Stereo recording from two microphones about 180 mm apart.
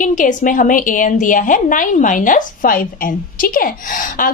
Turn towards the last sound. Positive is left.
turn(degrees=50)  # may be behind; listen again after turning